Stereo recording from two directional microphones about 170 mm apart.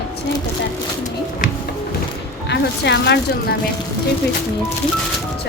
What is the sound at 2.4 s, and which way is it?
Speech, 85° left.